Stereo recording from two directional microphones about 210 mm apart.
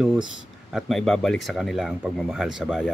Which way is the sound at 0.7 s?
Centre (ahead or behind).